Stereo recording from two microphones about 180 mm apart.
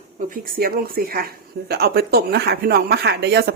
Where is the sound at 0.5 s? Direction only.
55° right (ahead or behind).